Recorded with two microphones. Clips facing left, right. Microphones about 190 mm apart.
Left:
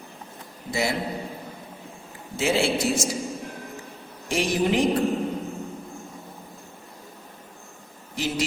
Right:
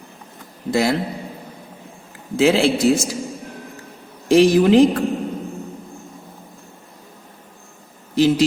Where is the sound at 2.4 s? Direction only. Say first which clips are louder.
Right 7 dB; 90° right.